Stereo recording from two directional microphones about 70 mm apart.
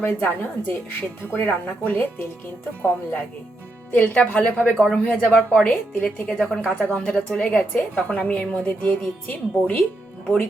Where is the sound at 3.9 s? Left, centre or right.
Left.